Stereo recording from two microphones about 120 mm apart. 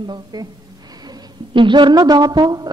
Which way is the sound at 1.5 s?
40° right (ahead or behind).